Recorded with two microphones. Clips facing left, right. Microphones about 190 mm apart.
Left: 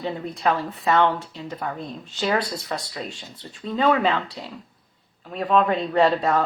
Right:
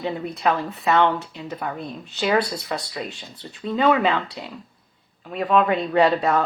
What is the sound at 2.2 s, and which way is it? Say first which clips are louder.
Speech: right 3 dB; 10° right (ahead or behind).